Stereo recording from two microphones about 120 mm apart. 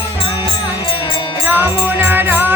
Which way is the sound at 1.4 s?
15° right (ahead or behind).